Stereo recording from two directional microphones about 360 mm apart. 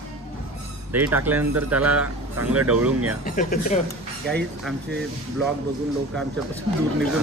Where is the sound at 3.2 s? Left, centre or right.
Left.